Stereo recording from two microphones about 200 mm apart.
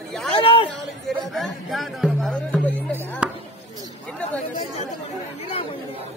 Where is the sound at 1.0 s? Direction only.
Centre (ahead or behind).